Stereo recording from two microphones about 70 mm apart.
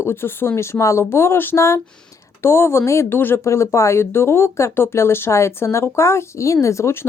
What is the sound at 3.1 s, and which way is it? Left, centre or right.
Speech, left.